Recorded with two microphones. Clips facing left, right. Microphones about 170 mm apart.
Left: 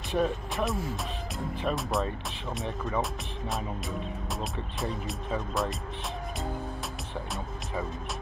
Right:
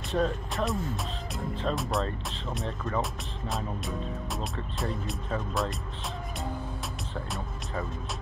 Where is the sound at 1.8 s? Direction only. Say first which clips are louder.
Even; centre (ahead or behind).